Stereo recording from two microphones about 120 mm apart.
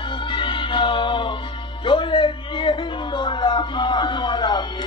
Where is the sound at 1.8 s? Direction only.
45° left (ahead or behind).